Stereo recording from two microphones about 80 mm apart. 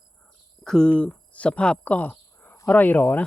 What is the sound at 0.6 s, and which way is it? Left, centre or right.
Speech, centre.